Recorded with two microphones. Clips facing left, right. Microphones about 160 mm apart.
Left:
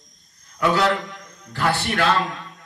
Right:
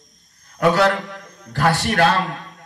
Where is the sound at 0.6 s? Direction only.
45° right (ahead or behind).